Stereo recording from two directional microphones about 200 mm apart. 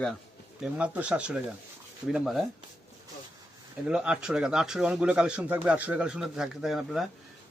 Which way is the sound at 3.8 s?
5° right (ahead or behind).